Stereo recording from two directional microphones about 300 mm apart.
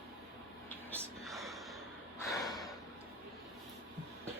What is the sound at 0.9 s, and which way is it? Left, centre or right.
Whispering, centre.